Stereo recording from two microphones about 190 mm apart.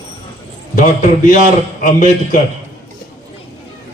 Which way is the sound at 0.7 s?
45° left (ahead or behind).